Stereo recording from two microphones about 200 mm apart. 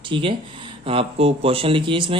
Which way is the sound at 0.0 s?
25° right (ahead or behind).